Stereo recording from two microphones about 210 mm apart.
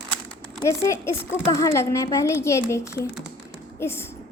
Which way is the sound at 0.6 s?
15° left (ahead or behind).